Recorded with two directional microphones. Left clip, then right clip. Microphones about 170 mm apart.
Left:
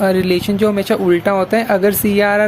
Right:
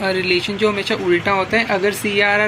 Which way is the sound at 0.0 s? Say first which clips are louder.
Left 3 dB; 80° left.